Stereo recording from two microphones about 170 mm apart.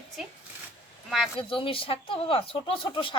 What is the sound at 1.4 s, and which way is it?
Speech, 30° left (ahead or behind).